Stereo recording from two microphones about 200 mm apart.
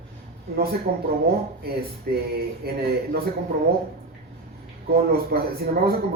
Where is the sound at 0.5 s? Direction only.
50° right (ahead or behind).